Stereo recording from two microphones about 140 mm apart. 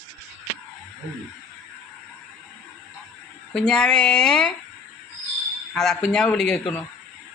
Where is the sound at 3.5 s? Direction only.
5° left (ahead or behind).